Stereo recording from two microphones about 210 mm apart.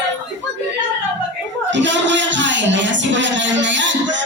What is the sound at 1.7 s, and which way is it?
Music, 60° right (ahead or behind).